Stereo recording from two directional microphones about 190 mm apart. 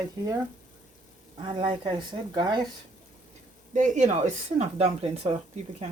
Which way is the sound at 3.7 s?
40° right (ahead or behind).